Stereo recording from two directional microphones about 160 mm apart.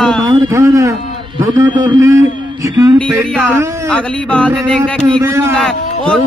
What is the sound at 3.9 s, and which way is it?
Speech, 10° left (ahead or behind).